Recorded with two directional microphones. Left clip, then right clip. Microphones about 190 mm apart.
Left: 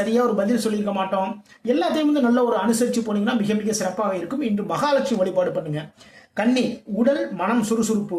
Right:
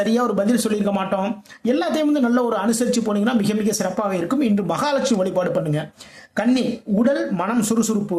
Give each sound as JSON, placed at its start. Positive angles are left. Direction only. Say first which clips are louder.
{"t": 0.0, "sound": "speech", "louder": "right 1 dB", "side_deg": -35}